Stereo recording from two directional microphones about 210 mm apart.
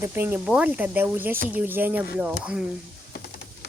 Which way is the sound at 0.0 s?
10° right (ahead or behind).